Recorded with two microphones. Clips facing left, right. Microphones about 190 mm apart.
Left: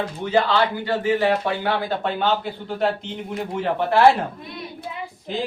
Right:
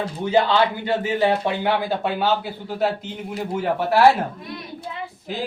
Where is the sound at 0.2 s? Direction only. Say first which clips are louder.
Right 2 dB; 15° right (ahead or behind).